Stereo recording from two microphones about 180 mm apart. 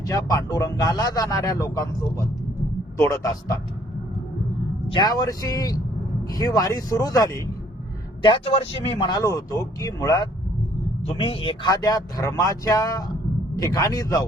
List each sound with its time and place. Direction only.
0.0 s a man's voice: 20° left (ahead or behind)
4.9 s speech: 25° left (ahead or behind)
8.2 s speech: 30° left (ahead or behind)
11.0 s speech: 35° left (ahead or behind)